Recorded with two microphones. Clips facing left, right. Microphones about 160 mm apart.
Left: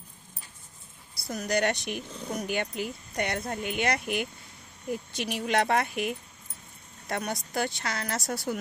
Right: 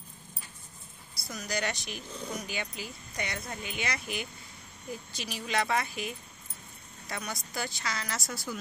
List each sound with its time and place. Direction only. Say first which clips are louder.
1.3 s speech: left 7 dB; 60° left (ahead or behind)